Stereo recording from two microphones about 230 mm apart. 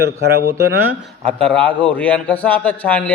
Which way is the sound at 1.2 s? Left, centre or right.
Centre.